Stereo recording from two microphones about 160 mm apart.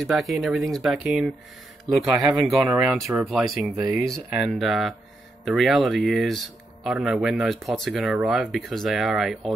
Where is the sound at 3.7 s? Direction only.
25° right (ahead or behind).